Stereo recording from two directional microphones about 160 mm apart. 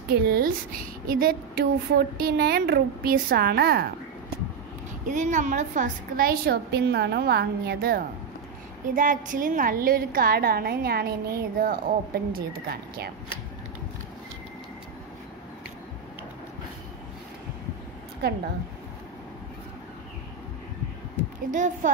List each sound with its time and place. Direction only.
0.1 s a woman's voice: 65° right (ahead or behind)
5.0 s a woman's voice: 50° right (ahead or behind); by 8.0 s 80° right
8.8 s a woman's voice: 55° right (ahead or behind); by 13.1 s 75° right (ahead or behind)
21.5 s a woman's voice: 50° right (ahead or behind)